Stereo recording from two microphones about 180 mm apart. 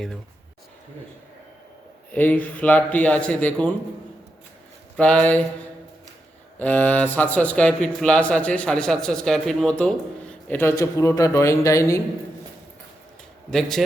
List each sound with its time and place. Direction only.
2.1 s a man's voice: 10° left (ahead or behind)
4.9 s a man's voice: 5° left (ahead or behind)
6.6 s a man's voice: 10° left (ahead or behind)
13.5 s a man's voice: centre (ahead or behind)